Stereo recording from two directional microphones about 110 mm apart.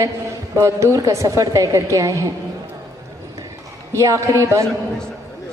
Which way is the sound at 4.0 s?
30° right (ahead or behind).